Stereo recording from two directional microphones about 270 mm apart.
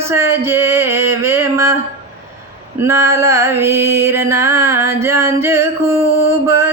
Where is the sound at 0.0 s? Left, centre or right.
Centre.